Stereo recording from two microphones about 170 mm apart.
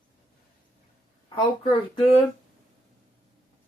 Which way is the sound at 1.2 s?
30° left (ahead or behind).